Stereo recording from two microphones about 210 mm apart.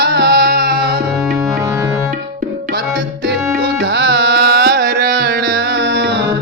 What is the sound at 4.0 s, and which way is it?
Carnatic music, 50° right (ahead or behind).